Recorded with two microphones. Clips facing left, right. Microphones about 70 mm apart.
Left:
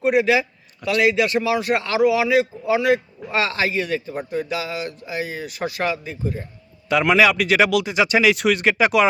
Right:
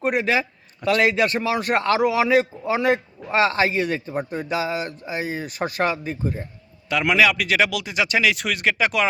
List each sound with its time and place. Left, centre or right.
0.0 s a man's voice: right
7.0 s speech: centre